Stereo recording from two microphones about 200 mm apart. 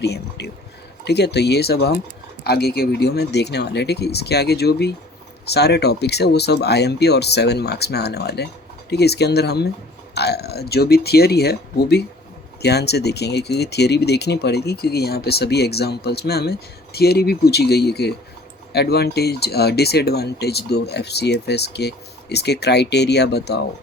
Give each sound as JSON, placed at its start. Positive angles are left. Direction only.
{"t": 0.0, "sound": "speech", "side_deg": 55}